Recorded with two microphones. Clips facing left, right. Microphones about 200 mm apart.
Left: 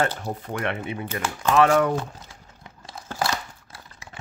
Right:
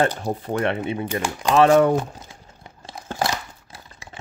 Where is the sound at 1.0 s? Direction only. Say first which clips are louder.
Right 2 dB; 10° right (ahead or behind).